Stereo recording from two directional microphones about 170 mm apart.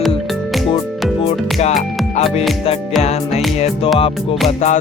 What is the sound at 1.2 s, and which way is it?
Music, 40° left (ahead or behind).